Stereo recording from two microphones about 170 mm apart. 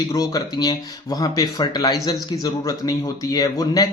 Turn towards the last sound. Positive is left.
turn(degrees=20)  # may be behind; listen again after turning